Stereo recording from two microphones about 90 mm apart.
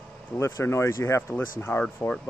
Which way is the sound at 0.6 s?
30° left (ahead or behind).